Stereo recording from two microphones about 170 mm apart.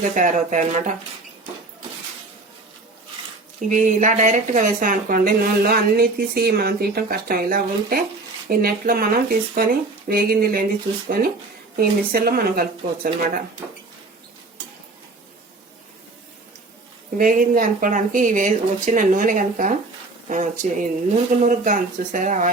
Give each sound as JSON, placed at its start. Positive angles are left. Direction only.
{"t": 0.1, "sound": "speech", "side_deg": -50}
{"t": 3.7, "sound": "a woman's voice", "side_deg": -45}
{"t": 11.8, "sound": "a woman's voice", "side_deg": -60}
{"t": 17.2, "sound": "speech", "side_deg": -55}